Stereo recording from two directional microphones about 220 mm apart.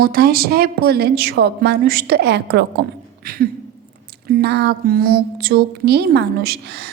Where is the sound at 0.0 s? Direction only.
45° right (ahead or behind).